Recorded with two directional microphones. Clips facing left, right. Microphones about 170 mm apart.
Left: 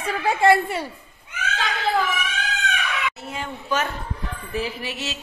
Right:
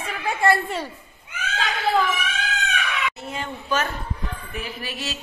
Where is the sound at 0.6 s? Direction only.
10° left (ahead or behind).